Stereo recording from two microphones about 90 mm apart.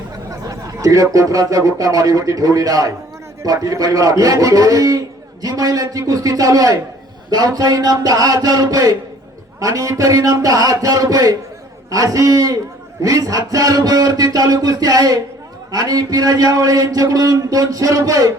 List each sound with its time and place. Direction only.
0.4 s a man's voice: 40° right (ahead or behind)